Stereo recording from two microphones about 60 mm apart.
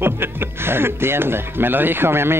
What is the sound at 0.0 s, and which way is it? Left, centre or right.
Speech, right.